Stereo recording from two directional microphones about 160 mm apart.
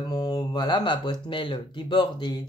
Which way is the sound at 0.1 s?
25° left (ahead or behind).